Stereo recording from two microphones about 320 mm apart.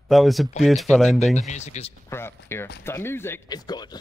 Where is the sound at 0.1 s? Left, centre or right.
Centre.